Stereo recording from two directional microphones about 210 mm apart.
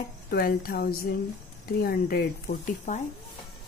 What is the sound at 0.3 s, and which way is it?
A woman's voice, 45° left (ahead or behind).